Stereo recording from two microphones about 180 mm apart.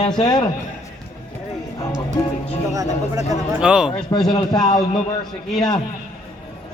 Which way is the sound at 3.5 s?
5° right (ahead or behind).